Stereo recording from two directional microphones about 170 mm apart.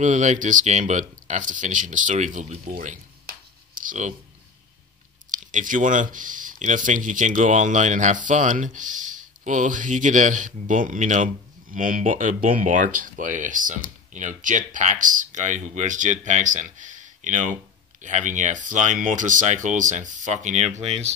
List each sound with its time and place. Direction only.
0.0 s speech: 45° right (ahead or behind)
3.7 s a sound: 50° right (ahead or behind)
5.3 s speech: 50° right (ahead or behind)